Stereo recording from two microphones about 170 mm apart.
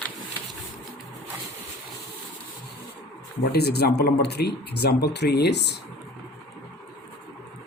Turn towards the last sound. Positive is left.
turn(degrees=80)